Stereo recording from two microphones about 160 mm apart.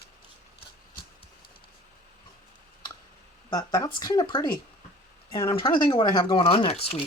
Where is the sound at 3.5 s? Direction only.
25° left (ahead or behind).